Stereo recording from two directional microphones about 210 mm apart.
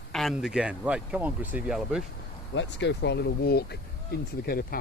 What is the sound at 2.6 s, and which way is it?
Speech, 55° left (ahead or behind).